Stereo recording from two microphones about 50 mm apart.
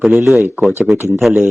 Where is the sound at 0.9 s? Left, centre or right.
Right.